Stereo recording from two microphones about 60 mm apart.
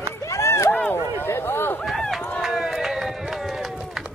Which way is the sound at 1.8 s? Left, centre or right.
Centre.